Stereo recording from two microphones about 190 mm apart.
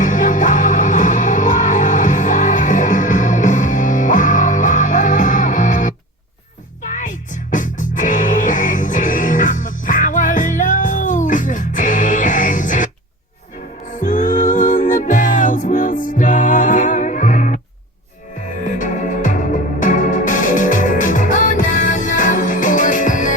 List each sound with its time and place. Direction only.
0.0 s music: 40° left (ahead or behind)
6.9 s music: 40° left (ahead or behind)
18.6 s music: 45° left (ahead or behind)